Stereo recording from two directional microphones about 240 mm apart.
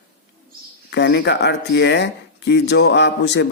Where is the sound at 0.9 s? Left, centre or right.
Left.